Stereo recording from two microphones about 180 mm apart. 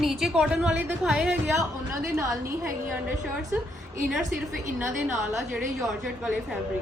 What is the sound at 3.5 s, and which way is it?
Speech, 10° right (ahead or behind).